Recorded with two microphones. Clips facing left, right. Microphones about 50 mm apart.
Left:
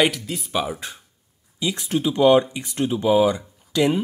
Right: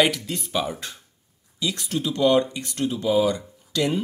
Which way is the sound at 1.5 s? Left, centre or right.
Left.